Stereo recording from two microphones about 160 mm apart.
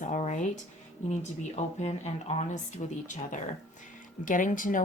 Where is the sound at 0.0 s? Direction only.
50° left (ahead or behind).